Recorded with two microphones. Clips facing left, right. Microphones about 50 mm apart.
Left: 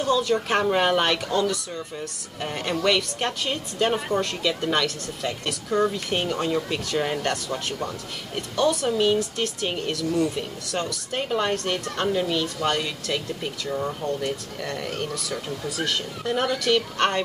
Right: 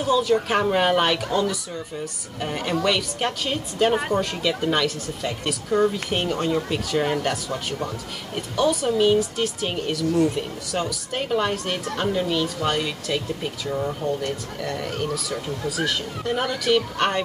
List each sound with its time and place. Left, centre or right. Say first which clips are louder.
0.0 s a woman's voice: right 2 dB; centre